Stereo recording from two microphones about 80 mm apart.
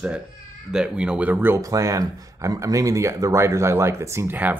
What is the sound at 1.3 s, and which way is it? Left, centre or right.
Speech, right.